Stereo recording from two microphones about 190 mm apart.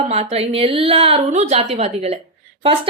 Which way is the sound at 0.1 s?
35° right (ahead or behind).